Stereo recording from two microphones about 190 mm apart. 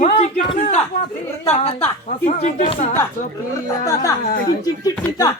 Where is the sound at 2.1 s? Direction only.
35° left (ahead or behind).